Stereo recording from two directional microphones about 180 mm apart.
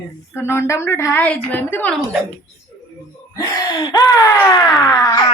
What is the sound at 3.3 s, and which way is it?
Wail, 15° left (ahead or behind).